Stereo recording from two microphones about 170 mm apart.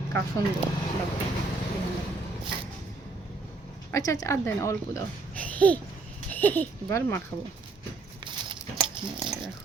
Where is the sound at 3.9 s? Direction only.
20° left (ahead or behind).